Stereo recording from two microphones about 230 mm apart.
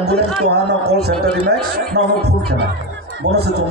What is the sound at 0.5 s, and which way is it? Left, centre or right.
A man's voice, right.